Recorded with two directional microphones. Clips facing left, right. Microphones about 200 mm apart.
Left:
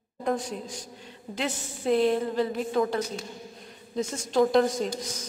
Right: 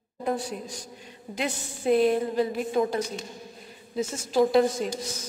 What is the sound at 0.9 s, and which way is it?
A woman's voice, 15° right (ahead or behind).